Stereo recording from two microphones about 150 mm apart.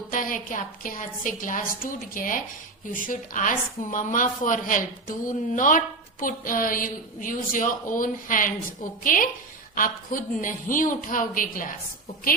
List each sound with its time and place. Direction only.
0.1 s a woman's voice: 65° left (ahead or behind)